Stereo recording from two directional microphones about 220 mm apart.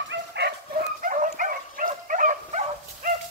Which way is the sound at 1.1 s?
35° right (ahead or behind).